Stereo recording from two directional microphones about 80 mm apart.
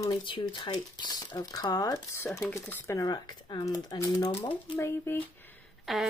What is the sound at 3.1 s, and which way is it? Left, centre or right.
Speech, left.